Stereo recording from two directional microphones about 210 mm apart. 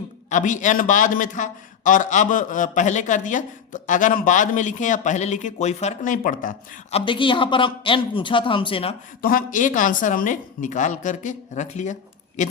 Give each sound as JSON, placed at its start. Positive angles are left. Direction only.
{"t": 0.3, "sound": "a man's voice", "side_deg": 35}
{"t": 7.0, "sound": "speech", "side_deg": 25}
{"t": 9.2, "sound": "a man's voice", "side_deg": 40}